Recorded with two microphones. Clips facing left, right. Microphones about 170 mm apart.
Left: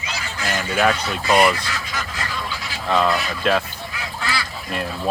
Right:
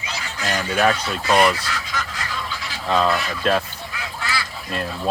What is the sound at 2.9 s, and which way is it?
Speech, 5° left (ahead or behind).